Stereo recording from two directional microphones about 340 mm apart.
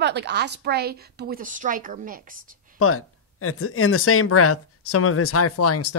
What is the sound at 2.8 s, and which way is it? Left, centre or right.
Speech, left.